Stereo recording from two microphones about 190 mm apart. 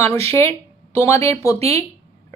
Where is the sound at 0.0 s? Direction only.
15° left (ahead or behind).